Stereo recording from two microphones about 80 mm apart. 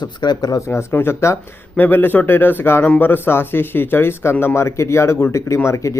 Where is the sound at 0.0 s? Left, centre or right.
Left.